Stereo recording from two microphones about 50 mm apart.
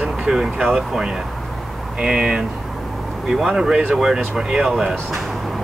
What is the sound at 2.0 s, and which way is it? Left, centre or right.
Speech, centre.